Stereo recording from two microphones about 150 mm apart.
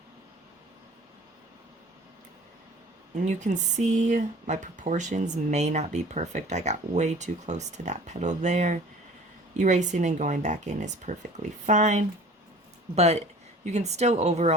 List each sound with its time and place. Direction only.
3.2 s speech: 55° right (ahead or behind)